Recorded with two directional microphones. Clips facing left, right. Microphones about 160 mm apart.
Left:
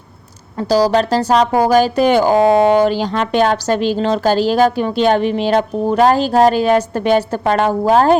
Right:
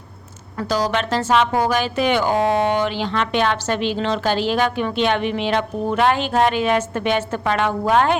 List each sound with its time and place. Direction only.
0.5 s speech: 35° left (ahead or behind)